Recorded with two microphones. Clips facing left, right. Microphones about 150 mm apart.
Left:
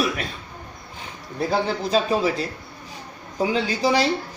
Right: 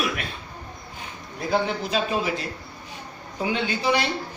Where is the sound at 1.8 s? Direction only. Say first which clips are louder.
Left 4 dB; 35° left (ahead or behind).